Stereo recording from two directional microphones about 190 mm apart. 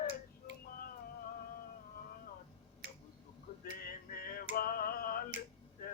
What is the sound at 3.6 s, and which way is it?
Male singing, 50° left (ahead or behind).